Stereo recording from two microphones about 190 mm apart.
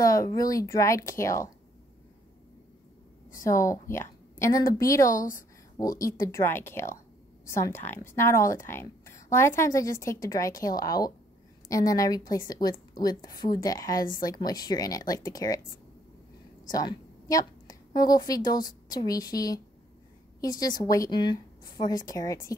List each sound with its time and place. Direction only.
0.0 s a woman's voice: 15° left (ahead or behind)
3.3 s a woman's voice: 15° left (ahead or behind)
5.0 s a woman's voice: 45° left (ahead or behind)
5.8 s a woman's voice: 15° left (ahead or behind)
16.6 s a woman's voice: 20° left (ahead or behind)